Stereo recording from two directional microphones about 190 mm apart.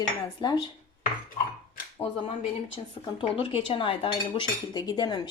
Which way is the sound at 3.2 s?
25° left (ahead or behind).